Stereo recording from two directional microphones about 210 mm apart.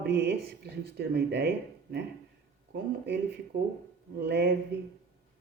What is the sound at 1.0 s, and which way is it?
Speech, 50° right (ahead or behind).